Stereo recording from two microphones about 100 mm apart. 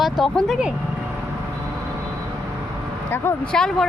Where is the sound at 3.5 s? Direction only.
5° left (ahead or behind).